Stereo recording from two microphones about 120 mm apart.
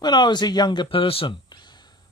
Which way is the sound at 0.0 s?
35° left (ahead or behind).